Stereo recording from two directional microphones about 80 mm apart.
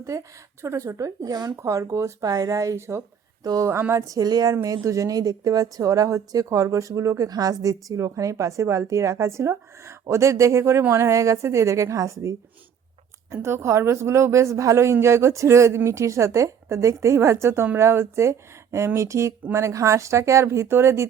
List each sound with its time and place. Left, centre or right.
0.0 s speech: right
1.6 s a woman's voice: right
3.4 s speech: right
3.7 s a woman's voice: right
4.0 s speech: right
4.6 s a woman's voice: right